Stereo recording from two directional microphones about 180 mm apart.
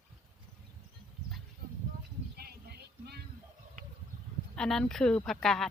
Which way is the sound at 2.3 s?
60° right (ahead or behind).